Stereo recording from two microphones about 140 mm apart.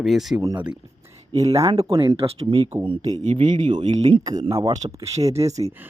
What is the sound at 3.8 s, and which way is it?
Speech, 50° right (ahead or behind).